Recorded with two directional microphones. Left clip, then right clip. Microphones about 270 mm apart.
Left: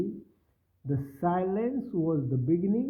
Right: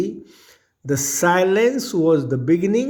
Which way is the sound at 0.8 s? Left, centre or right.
Right.